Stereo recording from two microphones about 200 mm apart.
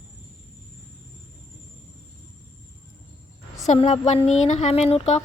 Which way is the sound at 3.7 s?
35° left (ahead or behind).